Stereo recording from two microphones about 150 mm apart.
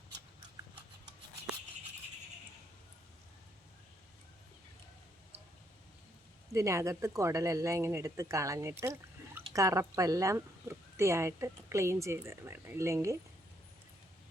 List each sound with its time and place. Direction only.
6.5 s speech: 20° right (ahead or behind)